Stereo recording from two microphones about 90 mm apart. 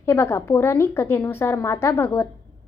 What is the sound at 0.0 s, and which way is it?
A woman's voice, 30° left (ahead or behind).